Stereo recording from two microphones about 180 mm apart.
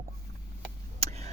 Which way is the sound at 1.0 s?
35° right (ahead or behind).